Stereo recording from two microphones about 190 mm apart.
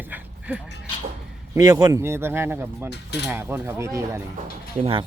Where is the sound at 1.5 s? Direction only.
15° right (ahead or behind).